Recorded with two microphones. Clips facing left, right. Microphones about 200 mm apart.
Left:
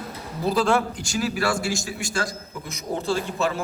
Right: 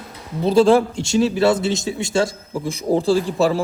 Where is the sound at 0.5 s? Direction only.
30° right (ahead or behind).